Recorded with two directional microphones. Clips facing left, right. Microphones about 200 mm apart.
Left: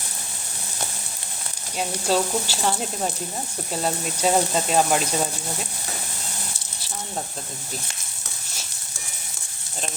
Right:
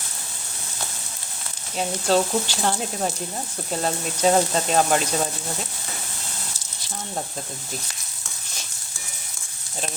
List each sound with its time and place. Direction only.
2.0 s speech: 5° left (ahead or behind)